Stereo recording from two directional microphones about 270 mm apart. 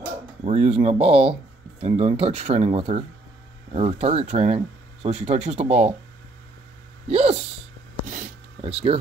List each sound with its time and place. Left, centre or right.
0.4 s speech: right
7.1 s speech: right
8.1 s a sound: right